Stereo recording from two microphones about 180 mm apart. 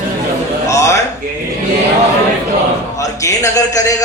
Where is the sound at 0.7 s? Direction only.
15° left (ahead or behind).